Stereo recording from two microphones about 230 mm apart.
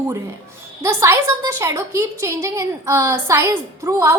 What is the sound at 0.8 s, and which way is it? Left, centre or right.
A woman's voice, centre.